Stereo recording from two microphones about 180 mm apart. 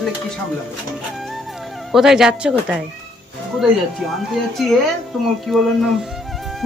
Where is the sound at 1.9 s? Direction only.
Centre (ahead or behind).